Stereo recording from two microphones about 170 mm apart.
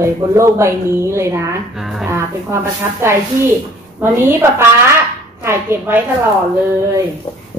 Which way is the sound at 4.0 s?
15° right (ahead or behind).